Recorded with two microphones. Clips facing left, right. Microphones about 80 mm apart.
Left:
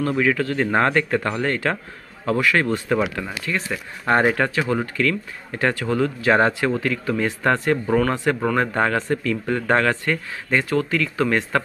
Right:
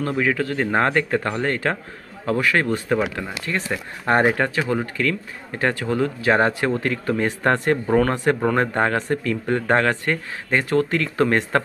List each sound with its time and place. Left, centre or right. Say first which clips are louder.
0.1 s speech: left 1 dB; centre
10.8 s speech: right 2 dB; right